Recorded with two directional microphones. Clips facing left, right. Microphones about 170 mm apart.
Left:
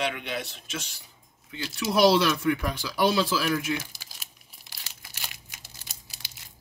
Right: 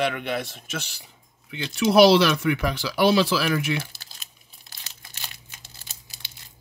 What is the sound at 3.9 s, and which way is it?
Crumpling, 10° left (ahead or behind).